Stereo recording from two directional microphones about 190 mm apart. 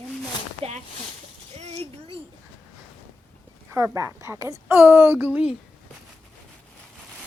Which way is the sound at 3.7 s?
15° right (ahead or behind).